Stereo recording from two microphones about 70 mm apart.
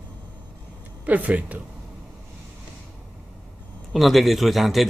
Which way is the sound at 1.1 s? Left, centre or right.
Right.